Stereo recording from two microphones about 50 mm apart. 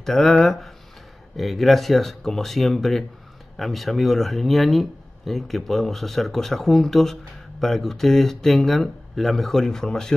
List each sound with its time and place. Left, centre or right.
0.0 s speech: centre